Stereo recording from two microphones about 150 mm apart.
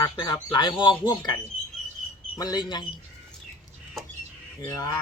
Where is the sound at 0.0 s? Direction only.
30° left (ahead or behind).